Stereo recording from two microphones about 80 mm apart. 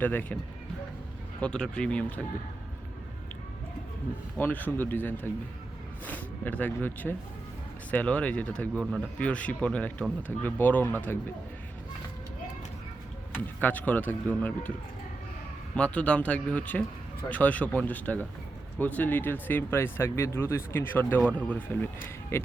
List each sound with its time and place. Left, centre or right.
0.0 s speech: left
1.4 s speech: centre
4.4 s speech: left
13.3 s speech: left
15.7 s speech: centre; by 22.4 s left